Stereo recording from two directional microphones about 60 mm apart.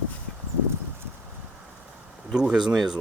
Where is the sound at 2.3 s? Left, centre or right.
Centre.